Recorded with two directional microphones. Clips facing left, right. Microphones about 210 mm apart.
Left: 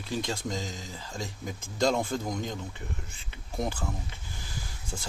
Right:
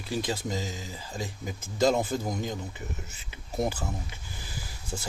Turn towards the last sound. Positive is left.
turn(degrees=-15)  # may be behind; listen again after turning